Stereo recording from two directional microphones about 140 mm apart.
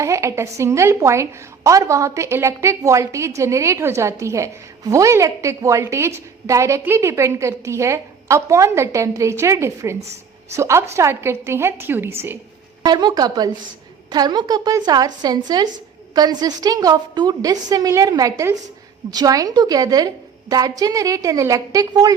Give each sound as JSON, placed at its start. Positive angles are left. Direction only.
{"t": 0.0, "sound": "a woman's voice", "side_deg": -20}
{"t": 12.8, "sound": "a woman's voice", "side_deg": -30}